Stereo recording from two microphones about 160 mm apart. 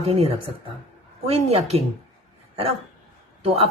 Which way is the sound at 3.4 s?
35° right (ahead or behind).